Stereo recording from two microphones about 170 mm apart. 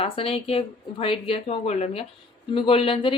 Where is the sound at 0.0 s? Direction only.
35° left (ahead or behind).